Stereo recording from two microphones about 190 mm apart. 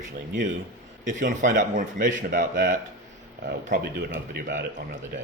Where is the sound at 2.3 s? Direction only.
45° right (ahead or behind).